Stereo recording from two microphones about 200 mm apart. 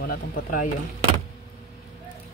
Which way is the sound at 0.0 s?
45° left (ahead or behind).